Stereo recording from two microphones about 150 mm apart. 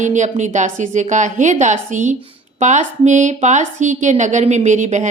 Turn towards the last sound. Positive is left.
turn(degrees=-55)  # may be behind; listen again after turning